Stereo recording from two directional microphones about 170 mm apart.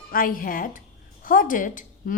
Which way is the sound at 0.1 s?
55° left (ahead or behind).